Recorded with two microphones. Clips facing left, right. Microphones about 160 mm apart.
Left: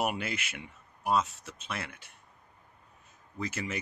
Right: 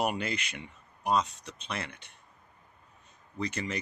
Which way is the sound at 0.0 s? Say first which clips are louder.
Right 1 dB; 5° left (ahead or behind).